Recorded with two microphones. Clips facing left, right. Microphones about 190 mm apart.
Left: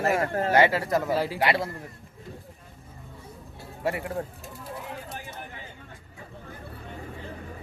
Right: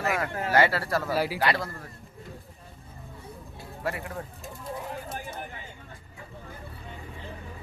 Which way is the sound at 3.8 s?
25° left (ahead or behind).